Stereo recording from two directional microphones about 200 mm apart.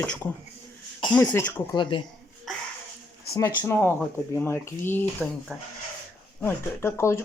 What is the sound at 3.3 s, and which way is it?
Speech, 15° left (ahead or behind).